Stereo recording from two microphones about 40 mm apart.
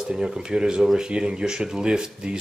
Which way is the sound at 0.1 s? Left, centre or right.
Centre.